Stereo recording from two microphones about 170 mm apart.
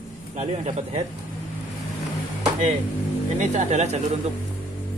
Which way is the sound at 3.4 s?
45° right (ahead or behind).